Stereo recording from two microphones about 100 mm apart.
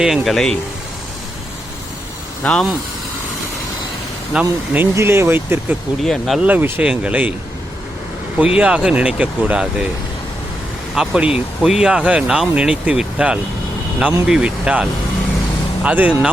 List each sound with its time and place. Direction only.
0.0 s speech: centre (ahead or behind)
2.4 s speech: 10° left (ahead or behind)
4.4 s speech: 15° right (ahead or behind)
4.9 s speech: 25° right (ahead or behind)
6.0 s speech: centre (ahead or behind)
6.4 s speech: 15° right (ahead or behind)
8.4 s speech: 10° right (ahead or behind)
10.9 s speech: 5° right (ahead or behind)